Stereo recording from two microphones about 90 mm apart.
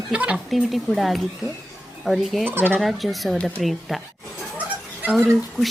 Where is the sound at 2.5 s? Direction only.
20° right (ahead or behind).